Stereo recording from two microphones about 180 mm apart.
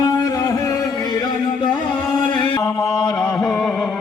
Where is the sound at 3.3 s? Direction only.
Centre (ahead or behind).